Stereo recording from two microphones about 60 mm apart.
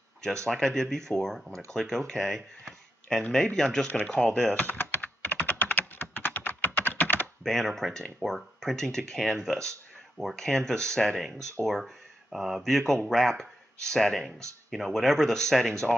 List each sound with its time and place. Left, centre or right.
0.5 s speech: centre
4.6 s typing: left
7.4 s speech: centre
11.6 s speech: centre